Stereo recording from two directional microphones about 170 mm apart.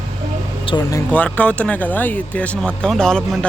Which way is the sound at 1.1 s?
10° left (ahead or behind).